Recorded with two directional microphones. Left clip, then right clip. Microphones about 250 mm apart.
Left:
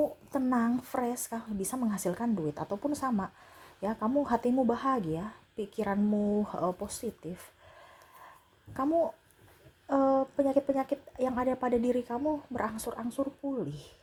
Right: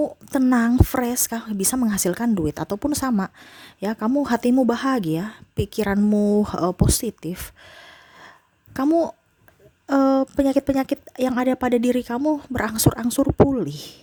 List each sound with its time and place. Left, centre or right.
0.0 s speech: right
8.7 s speech: right